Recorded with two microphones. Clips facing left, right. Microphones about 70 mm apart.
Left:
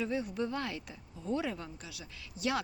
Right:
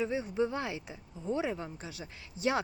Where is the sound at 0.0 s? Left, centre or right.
Right.